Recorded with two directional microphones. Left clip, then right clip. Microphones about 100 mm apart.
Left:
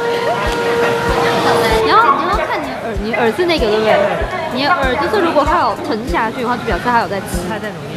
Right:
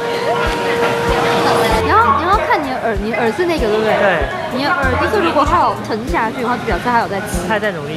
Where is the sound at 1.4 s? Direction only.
15° left (ahead or behind).